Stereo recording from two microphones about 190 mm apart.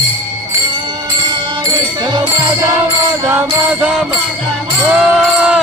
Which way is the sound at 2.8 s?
10° right (ahead or behind).